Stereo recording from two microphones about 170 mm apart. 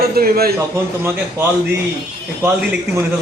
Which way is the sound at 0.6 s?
15° right (ahead or behind).